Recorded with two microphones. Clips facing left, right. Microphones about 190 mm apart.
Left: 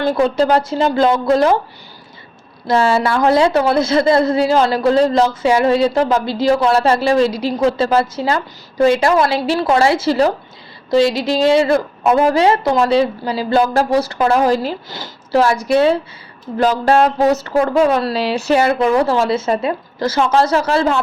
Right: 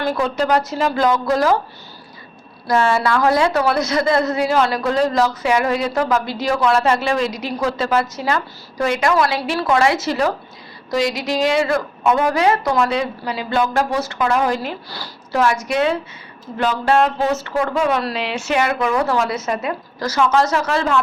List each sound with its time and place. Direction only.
0.0 s a woman's voice: 30° left (ahead or behind)
2.6 s a woman's voice: 30° left (ahead or behind)
14.8 s speech: 20° left (ahead or behind)
15.4 s speech: 35° left (ahead or behind)